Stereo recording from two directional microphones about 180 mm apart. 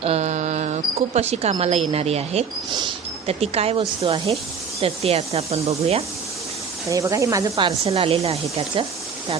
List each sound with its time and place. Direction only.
0.0 s a sound: 35° right (ahead or behind)
1.9 s speech: 35° right (ahead or behind)
6.9 s speech: 15° right (ahead or behind)
7.9 s speech: 30° right (ahead or behind)